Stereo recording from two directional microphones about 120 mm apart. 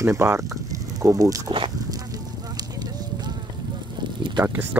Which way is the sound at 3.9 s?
40° right (ahead or behind).